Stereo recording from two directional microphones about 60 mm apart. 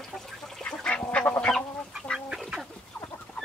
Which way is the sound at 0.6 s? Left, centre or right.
Centre.